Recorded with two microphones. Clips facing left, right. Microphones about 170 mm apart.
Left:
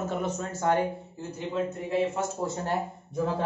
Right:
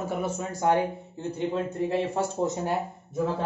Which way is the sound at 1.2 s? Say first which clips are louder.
Right 3 dB; 30° right (ahead or behind).